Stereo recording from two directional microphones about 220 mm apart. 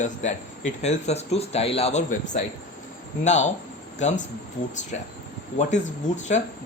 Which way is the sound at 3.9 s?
30° left (ahead or behind).